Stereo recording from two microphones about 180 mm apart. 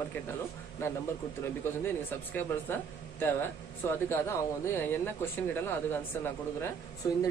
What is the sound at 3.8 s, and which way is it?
Speech, 15° left (ahead or behind).